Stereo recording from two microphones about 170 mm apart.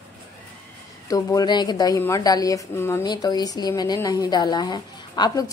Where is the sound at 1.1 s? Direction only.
20° left (ahead or behind).